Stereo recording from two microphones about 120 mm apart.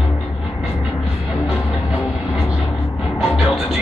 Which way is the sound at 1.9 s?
25° left (ahead or behind).